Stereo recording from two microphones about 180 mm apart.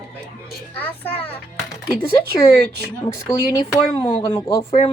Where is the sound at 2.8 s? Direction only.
15° left (ahead or behind).